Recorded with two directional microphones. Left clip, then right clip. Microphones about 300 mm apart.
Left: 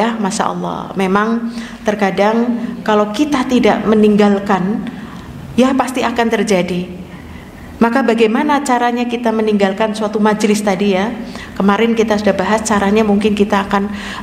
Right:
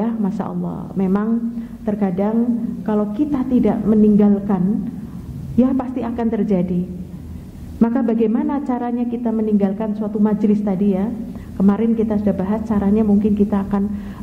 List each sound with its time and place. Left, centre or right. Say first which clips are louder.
0.0 s a sound: left 8 dB; centre
0.5 s speech: left 9 dB; left
0.9 s a woman's voice: left 6 dB; centre
7.8 s a woman's voice: left 6 dB; centre